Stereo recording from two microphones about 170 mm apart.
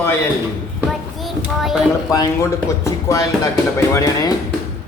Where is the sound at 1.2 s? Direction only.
Centre (ahead or behind).